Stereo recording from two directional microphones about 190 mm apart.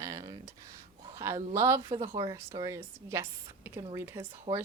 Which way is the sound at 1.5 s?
15° right (ahead or behind).